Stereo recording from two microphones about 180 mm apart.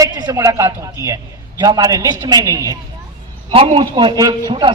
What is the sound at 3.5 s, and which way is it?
A man's voice, 30° right (ahead or behind).